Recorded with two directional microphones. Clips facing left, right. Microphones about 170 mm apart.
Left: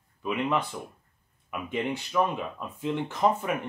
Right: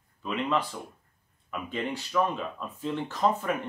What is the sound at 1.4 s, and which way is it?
Speech, 15° left (ahead or behind).